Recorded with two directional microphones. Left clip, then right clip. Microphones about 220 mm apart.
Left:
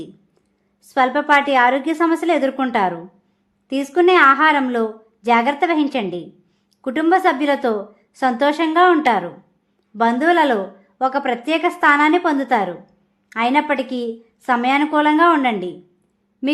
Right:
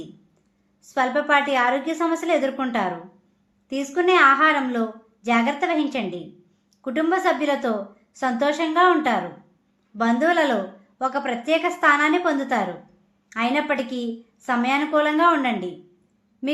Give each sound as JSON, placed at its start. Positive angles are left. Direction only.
{"t": 0.9, "sound": "speech", "side_deg": 40}